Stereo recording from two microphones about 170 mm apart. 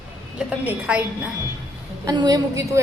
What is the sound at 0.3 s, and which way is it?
Speech, 10° right (ahead or behind).